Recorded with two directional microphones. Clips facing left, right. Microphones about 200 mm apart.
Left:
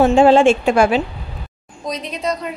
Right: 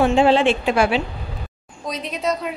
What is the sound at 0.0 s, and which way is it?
A woman's voice, 45° left (ahead or behind).